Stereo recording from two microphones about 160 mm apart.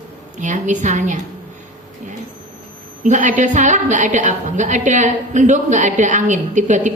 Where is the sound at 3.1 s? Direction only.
50° right (ahead or behind).